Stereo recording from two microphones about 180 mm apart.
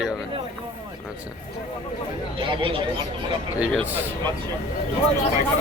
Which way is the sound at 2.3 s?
30° right (ahead or behind).